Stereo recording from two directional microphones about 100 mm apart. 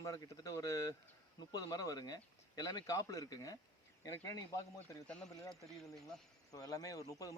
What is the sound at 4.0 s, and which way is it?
Speech, 30° left (ahead or behind).